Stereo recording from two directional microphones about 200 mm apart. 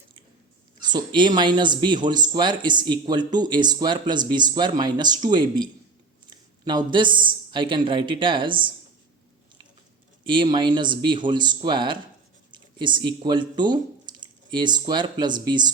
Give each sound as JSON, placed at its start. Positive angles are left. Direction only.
{"t": 0.8, "sound": "speech", "side_deg": -20}
{"t": 6.7, "sound": "speech", "side_deg": -20}
{"t": 10.2, "sound": "speech", "side_deg": -25}